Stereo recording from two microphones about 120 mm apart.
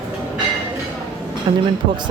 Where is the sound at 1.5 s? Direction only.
40° right (ahead or behind).